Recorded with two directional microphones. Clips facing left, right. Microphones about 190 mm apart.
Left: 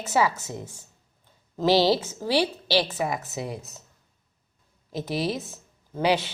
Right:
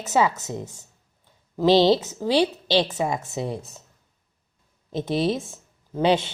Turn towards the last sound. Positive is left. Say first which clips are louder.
# right 3 dB
turn(degrees=-25)  # may be behind; listen again after turning